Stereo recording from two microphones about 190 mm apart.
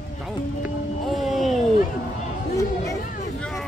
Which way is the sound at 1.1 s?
Centre (ahead or behind).